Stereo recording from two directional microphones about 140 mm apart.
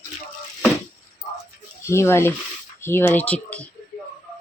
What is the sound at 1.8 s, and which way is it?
Speech, 20° left (ahead or behind).